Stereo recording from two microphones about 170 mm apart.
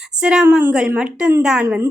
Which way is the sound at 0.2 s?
5° right (ahead or behind).